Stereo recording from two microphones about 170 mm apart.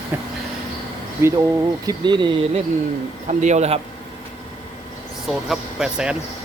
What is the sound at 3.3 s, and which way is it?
Speech, 45° right (ahead or behind).